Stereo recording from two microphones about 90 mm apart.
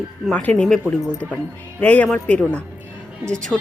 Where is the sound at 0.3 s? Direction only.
15° left (ahead or behind).